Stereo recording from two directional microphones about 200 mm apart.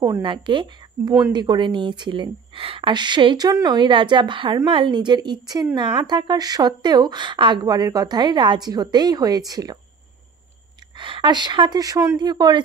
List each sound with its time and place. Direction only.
0.0 s a woman's voice: 20° right (ahead or behind)
11.0 s a woman's voice: 25° right (ahead or behind)